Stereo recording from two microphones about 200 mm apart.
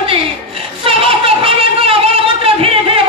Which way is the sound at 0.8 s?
30° right (ahead or behind).